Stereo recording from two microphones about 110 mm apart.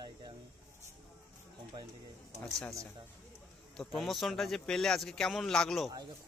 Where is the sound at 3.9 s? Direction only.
Centre (ahead or behind).